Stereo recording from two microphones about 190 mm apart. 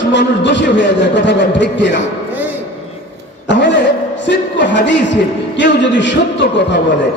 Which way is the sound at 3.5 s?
70° left (ahead or behind).